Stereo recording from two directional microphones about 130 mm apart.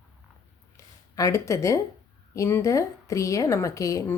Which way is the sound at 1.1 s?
25° left (ahead or behind).